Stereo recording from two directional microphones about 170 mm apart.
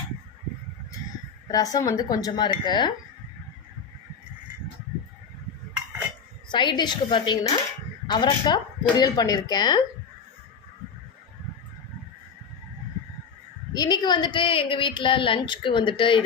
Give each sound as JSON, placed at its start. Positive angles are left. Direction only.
{"t": 1.5, "sound": "a woman's voice", "side_deg": 20}
{"t": 6.5, "sound": "a woman's voice", "side_deg": 25}
{"t": 13.7, "sound": "a woman's voice", "side_deg": 25}